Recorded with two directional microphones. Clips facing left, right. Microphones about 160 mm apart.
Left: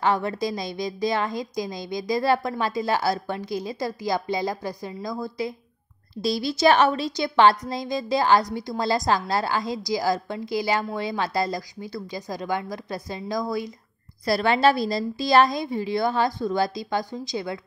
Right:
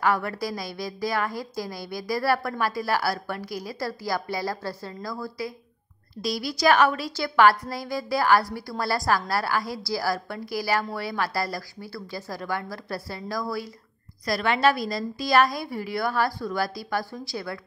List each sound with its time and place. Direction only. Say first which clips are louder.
0.0 s a woman's voice: left 2 dB; 20° left (ahead or behind)
14.2 s a woman's voice: left 3 dB; 30° left (ahead or behind)